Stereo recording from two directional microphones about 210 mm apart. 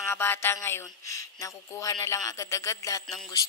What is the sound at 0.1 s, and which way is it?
Speech, 10° left (ahead or behind).